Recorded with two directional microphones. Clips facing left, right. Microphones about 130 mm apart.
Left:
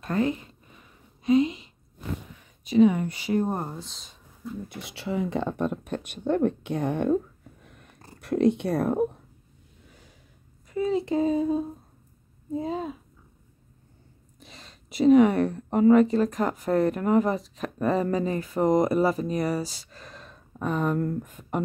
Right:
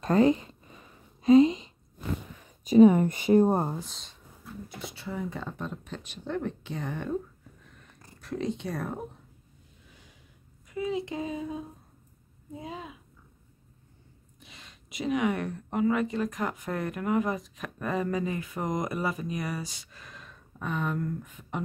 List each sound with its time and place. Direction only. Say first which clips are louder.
0.0 s speech: right 4 dB; 30° right (ahead or behind)
1.2 s a sound: right 3 dB; 30° right (ahead or behind)
2.6 s speech: right 2 dB; 45° right (ahead or behind)
3.3 s speech: right 4 dB; 30° right (ahead or behind)
3.8 s speech: even; centre (ahead or behind)
4.6 s speech: left 4 dB; 85° left; by 7.2 s 60° left (ahead or behind)
8.2 s speech: left 10 dB; 65° left (ahead or behind)
10.7 s a sound: left 6 dB; 35° left (ahead or behind)
12.5 s speech: left 10 dB; 35° left (ahead or behind)
14.4 s speech: left 4 dB; 35° left (ahead or behind)